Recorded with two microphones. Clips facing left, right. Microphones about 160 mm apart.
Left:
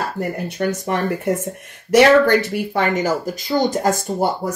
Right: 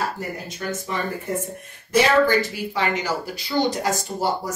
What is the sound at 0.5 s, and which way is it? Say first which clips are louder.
Speech: left 8 dB; 65° left (ahead or behind).